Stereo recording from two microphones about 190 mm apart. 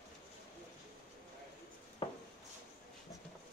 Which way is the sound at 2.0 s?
25° left (ahead or behind).